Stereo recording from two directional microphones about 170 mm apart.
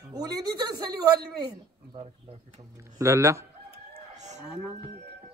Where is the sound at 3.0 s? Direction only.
15° right (ahead or behind).